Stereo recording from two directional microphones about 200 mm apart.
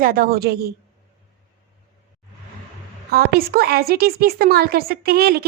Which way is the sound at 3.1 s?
50° right (ahead or behind).